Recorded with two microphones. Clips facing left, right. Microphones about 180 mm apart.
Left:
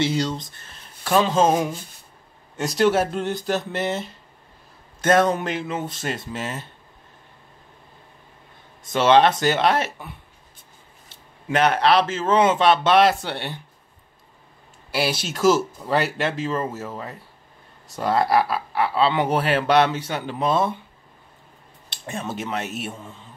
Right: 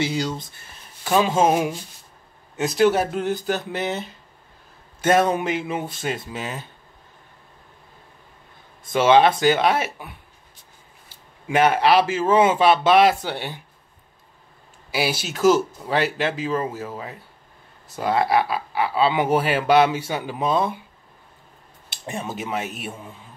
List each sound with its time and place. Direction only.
0.0 s speech: 5° right (ahead or behind)
1.3 s a sound: 15° right (ahead or behind)
2.5 s speech: centre (ahead or behind)
5.0 s a sound: 10° right (ahead or behind)
5.9 s speech: centre (ahead or behind)
8.8 s speech: 5° right (ahead or behind)
11.4 s speech: 5° right (ahead or behind)
14.9 s speech: centre (ahead or behind)
22.0 s speech: 15° right (ahead or behind)
22.3 s speech: centre (ahead or behind)